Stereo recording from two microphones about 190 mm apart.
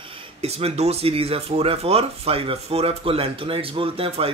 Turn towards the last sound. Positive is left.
turn(degrees=-30)  # may be behind; listen again after turning